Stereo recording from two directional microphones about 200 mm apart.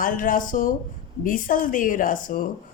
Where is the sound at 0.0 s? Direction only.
45° left (ahead or behind).